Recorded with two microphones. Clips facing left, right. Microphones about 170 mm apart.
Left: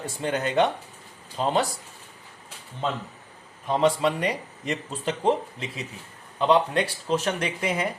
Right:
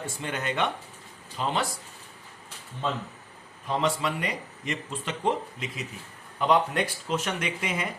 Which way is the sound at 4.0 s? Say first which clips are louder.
Left 5 dB; 35° left (ahead or behind).